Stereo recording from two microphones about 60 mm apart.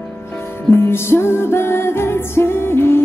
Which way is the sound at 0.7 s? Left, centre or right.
Left.